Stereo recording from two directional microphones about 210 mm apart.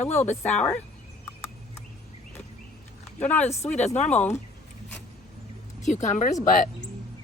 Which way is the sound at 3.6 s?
30° left (ahead or behind).